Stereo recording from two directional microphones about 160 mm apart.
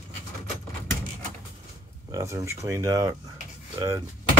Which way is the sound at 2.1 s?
20° right (ahead or behind).